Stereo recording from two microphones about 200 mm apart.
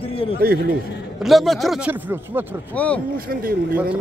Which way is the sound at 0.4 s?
50° right (ahead or behind).